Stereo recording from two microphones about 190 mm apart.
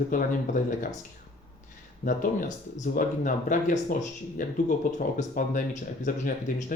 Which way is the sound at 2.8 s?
40° left (ahead or behind).